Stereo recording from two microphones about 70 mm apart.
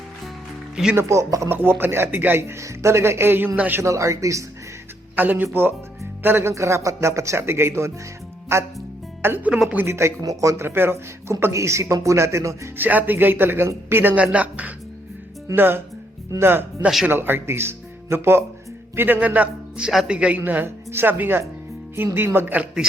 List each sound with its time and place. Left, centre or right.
0.9 s speech: right
1.8 s a man's voice: right
2.6 s speech: right
3.8 s speech: right
5.1 s a man's voice: right
6.5 s speech: right
9.2 s a man's voice: right
10.2 s speech: right
10.7 s speech: right
12.7 s a man's voice: right
18.9 s a man's voice: right